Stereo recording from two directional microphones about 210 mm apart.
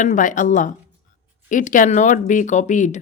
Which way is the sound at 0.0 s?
35° left (ahead or behind).